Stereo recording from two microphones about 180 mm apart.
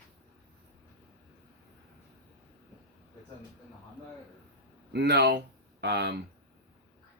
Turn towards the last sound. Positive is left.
turn(degrees=-70)  # may be behind; listen again after turning